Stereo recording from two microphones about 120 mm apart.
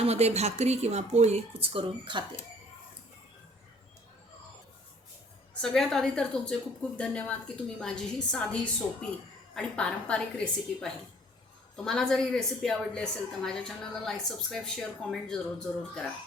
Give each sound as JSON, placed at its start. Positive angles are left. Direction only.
{"t": 0.0, "sound": "a woman's voice", "side_deg": -65}
{"t": 5.6, "sound": "a woman's voice", "side_deg": 5}